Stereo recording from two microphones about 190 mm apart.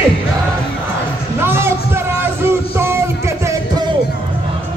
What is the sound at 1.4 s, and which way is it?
Music, 10° right (ahead or behind).